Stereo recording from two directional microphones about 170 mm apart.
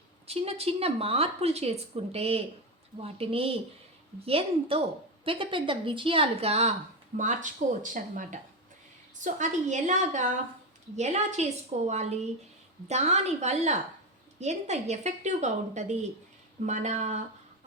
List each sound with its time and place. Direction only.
0.3 s a woman's voice: 35° right (ahead or behind)
7.1 s a woman's voice: 50° right (ahead or behind)